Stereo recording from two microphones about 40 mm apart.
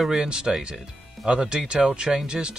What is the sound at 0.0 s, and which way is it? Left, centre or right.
Speech, centre.